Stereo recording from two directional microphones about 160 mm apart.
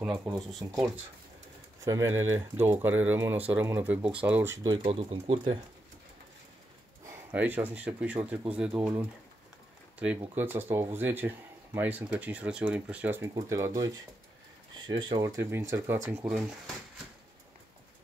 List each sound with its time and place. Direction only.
0.0 s speech: 5° right (ahead or behind)
1.8 s speech: 20° right (ahead or behind)
4.6 s speech: 35° right (ahead or behind)
7.1 s speech: 10° right (ahead or behind)
13.3 s speech: 20° right (ahead or behind)
16.3 s speech: centre (ahead or behind)